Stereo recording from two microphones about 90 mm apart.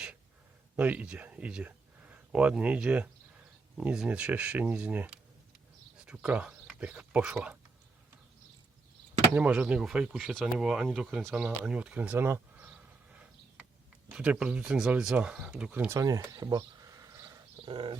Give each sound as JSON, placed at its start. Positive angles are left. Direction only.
{"t": 0.8, "sound": "speech", "side_deg": -15}
{"t": 9.3, "sound": "speech", "side_deg": -15}
{"t": 12.5, "sound": "a sound", "side_deg": -15}
{"t": 14.1, "sound": "speech", "side_deg": -10}
{"t": 15.9, "sound": "speech", "side_deg": -40}
{"t": 17.6, "sound": "speech", "side_deg": -75}